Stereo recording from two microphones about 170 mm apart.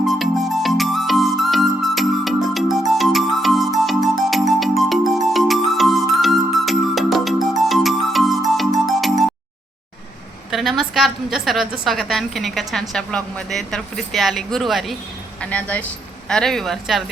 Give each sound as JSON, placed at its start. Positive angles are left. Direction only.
{"t": 0.0, "sound": "music", "side_deg": 0}
{"t": 10.5, "sound": "a woman's voice", "side_deg": 0}